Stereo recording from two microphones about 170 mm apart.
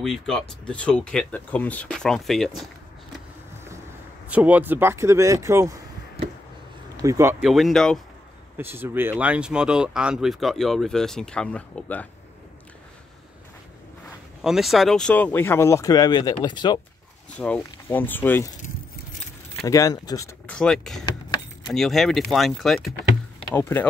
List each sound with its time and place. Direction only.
0.0 s speech: 5° left (ahead or behind)
4.3 s speech: 10° right (ahead or behind)
7.0 s speech: 15° right (ahead or behind)
7.4 s speech: centre (ahead or behind)
8.5 s speech: 15° right (ahead or behind); by 12.1 s 10° left (ahead or behind)
14.4 s speech: centre (ahead or behind); by 16.8 s 25° left (ahead or behind)
17.4 s speech: 5° left (ahead or behind)
19.6 s speech: 20° left (ahead or behind)
20.4 s speech: 5° left (ahead or behind)
23.5 s speech: 10° left (ahead or behind)